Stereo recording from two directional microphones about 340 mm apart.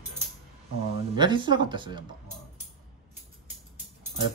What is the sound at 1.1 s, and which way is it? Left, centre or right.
Speech, centre.